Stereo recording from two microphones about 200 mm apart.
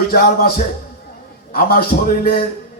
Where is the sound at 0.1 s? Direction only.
50° left (ahead or behind).